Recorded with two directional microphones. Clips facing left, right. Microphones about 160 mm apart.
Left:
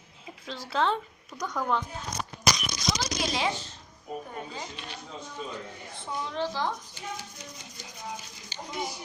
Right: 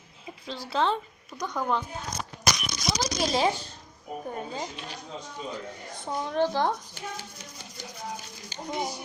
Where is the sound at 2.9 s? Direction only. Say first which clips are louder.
Right 8 dB; 40° right (ahead or behind).